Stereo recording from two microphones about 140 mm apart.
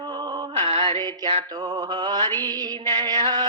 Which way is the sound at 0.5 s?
40° right (ahead or behind).